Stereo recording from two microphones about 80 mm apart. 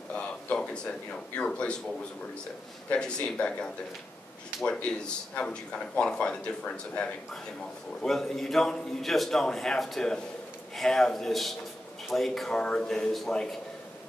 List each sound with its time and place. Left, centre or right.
0.1 s a sound: centre
1.1 s a man's voice: centre
2.9 s a man's voice: centre
4.6 s a man's voice: centre